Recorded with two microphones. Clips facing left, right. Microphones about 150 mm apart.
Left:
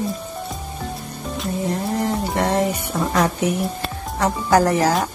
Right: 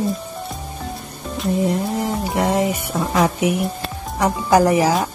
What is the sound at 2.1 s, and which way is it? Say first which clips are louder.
Music: right 1 dB; 10° right (ahead or behind).